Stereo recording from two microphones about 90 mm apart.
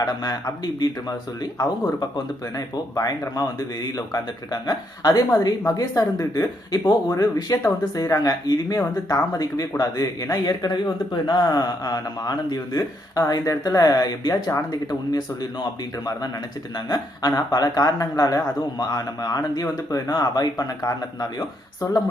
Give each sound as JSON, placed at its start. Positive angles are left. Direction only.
{"t": 0.0, "sound": "speech", "side_deg": 45}
{"t": 16.7, "sound": "speech", "side_deg": 50}